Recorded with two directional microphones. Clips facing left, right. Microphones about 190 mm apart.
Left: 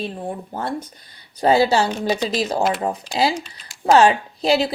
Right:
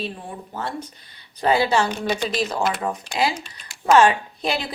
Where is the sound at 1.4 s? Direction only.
40° left (ahead or behind).